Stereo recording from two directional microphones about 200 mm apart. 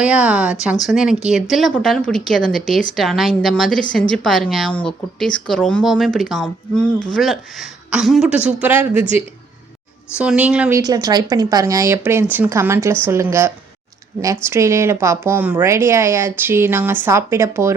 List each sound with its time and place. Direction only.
0.0 s speech: 5° right (ahead or behind)
10.2 s speech: 5° right (ahead or behind)